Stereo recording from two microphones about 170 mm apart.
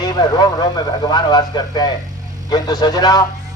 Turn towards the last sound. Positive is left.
turn(degrees=25)  # may be behind; listen again after turning